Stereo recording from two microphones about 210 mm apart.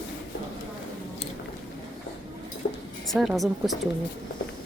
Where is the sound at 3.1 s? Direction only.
Centre (ahead or behind).